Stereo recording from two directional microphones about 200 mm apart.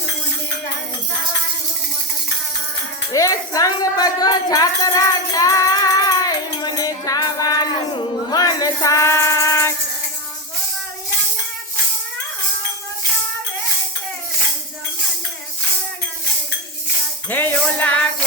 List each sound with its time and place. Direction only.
3.1 s speech: 15° left (ahead or behind)
17.2 s speech: 10° left (ahead or behind)